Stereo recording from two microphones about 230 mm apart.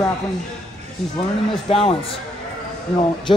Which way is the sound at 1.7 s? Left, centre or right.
Left.